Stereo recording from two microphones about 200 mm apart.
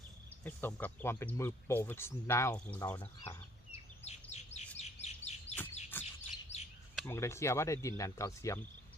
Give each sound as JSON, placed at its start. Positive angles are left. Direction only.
{"t": 0.4, "sound": "speech", "side_deg": 10}
{"t": 4.0, "sound": "bird", "side_deg": 35}
{"t": 4.8, "sound": "chirp", "side_deg": 35}
{"t": 5.9, "sound": "bird", "side_deg": 10}
{"t": 6.5, "sound": "chirp", "side_deg": 30}
{"t": 6.9, "sound": "speech", "side_deg": 10}